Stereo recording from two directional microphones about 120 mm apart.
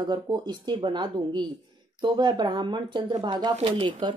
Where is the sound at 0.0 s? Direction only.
35° right (ahead or behind).